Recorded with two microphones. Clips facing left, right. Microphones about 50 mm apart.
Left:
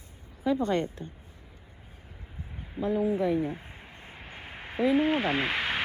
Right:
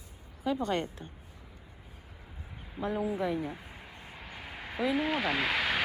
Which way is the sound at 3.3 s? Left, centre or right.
Left.